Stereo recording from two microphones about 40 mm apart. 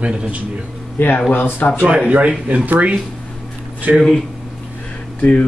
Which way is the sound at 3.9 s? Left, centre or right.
Right.